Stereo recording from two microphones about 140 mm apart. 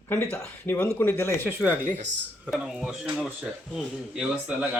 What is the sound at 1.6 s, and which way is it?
Speech, 10° right (ahead or behind).